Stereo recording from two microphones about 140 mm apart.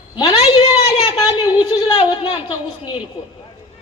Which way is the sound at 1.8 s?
35° left (ahead or behind).